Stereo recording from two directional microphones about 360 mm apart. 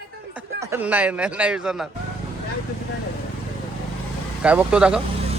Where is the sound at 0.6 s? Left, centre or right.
Centre.